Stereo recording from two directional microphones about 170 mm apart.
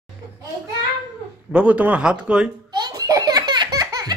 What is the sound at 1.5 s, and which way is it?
Speech, 5° right (ahead or behind).